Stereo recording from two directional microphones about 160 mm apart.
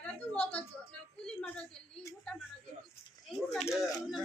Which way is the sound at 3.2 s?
Centre (ahead or behind).